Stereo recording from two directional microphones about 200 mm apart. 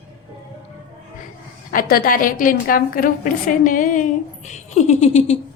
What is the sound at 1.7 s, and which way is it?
A woman's voice, 45° left (ahead or behind).